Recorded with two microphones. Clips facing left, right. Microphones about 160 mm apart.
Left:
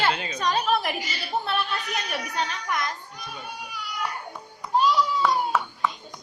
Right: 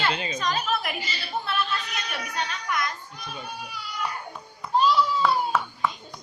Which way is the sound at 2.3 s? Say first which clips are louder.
Even; 35° left (ahead or behind).